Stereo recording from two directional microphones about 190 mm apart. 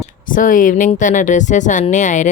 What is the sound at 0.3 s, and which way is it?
Speech, 45° left (ahead or behind).